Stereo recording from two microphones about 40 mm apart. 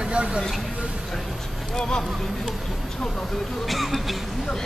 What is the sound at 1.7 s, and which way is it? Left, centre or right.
Speech, centre.